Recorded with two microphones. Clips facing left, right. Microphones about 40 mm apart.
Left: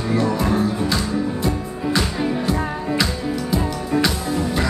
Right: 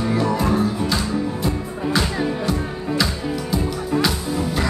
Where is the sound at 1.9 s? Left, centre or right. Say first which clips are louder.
Even; centre.